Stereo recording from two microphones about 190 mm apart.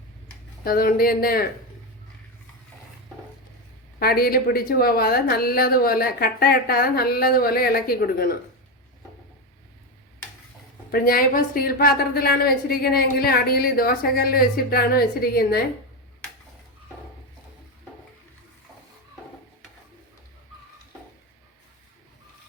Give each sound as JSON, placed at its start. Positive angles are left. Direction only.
{"t": 0.6, "sound": "a woman's voice", "side_deg": 50}
{"t": 4.0, "sound": "a woman's voice", "side_deg": 55}
{"t": 10.9, "sound": "a woman's voice", "side_deg": 50}